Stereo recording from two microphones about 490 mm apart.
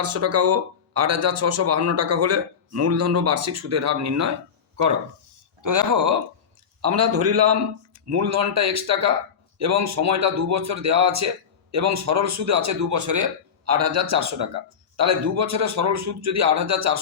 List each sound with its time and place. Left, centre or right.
0.0 s speech: right
5.6 s speech: right